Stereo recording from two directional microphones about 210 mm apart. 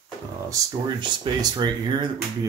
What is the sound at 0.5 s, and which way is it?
Speech, 20° right (ahead or behind).